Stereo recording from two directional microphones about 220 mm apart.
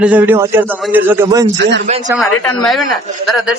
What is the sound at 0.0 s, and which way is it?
A man's voice, 5° right (ahead or behind).